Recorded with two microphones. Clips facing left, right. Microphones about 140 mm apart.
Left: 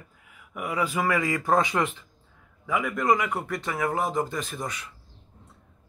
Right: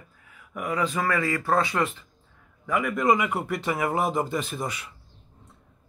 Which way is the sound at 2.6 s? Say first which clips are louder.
Right 1 dB; 5° left (ahead or behind).